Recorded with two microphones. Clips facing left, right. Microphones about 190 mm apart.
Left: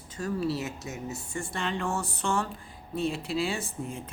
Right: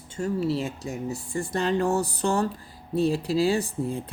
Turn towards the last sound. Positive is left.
turn(degrees=-35)  # may be behind; listen again after turning